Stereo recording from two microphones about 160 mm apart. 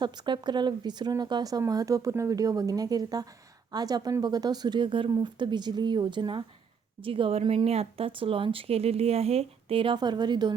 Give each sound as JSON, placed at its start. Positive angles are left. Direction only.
{"t": 0.0, "sound": "speech", "side_deg": -30}